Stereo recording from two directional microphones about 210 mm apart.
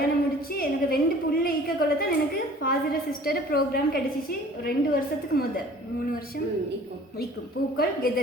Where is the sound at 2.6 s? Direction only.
45° left (ahead or behind).